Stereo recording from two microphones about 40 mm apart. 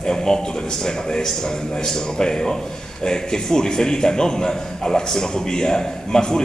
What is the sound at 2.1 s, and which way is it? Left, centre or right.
A man's voice, centre.